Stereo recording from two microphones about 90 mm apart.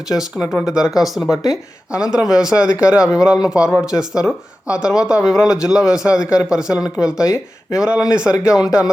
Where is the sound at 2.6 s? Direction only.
35° left (ahead or behind).